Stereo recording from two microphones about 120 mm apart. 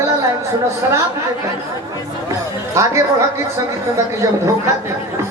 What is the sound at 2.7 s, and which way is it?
A woman's voice, 25° right (ahead or behind).